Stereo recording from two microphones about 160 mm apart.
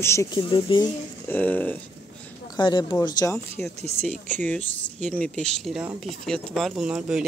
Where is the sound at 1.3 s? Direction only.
10° left (ahead or behind).